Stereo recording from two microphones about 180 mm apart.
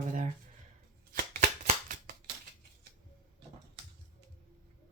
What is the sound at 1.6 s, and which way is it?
Scissors, 45° right (ahead or behind).